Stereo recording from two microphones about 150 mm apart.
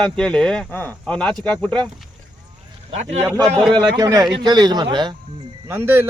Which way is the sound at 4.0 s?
25° right (ahead or behind).